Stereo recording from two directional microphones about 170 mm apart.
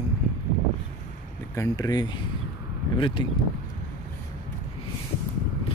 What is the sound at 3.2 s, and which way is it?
Speech, 30° left (ahead or behind).